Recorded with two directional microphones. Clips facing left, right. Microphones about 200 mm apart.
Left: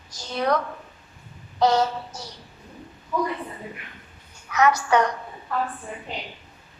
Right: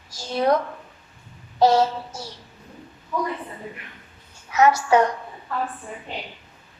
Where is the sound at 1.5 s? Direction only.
25° right (ahead or behind).